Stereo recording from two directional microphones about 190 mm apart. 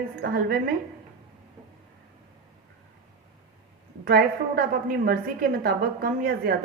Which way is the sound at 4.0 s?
50° right (ahead or behind).